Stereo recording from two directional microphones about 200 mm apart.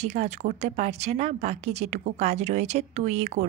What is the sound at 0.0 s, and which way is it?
A woman's voice, 35° right (ahead or behind).